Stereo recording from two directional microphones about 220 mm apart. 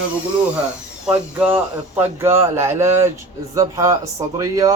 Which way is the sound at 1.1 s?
5° right (ahead or behind).